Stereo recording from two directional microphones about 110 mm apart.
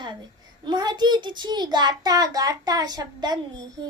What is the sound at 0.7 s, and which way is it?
Child singing, 40° right (ahead or behind).